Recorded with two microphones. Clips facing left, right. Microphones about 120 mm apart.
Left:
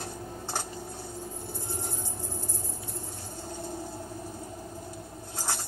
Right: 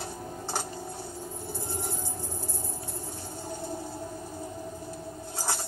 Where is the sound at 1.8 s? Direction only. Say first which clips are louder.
Right 2 dB; 15° left (ahead or behind).